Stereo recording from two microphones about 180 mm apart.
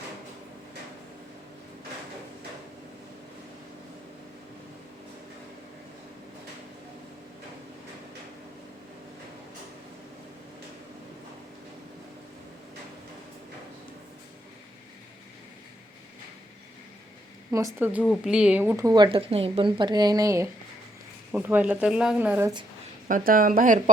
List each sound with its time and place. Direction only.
17.7 s a woman's voice: 10° right (ahead or behind)
23.0 s speech: 50° right (ahead or behind)